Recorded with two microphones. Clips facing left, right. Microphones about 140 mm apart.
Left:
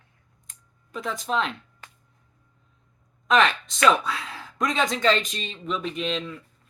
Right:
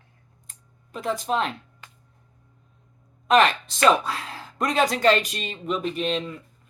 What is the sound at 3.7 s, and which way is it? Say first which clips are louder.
Speech: right 1 dB; 35° right (ahead or behind).